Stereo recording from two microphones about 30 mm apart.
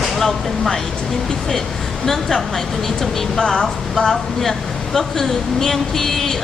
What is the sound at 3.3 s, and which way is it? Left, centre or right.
Speech, centre.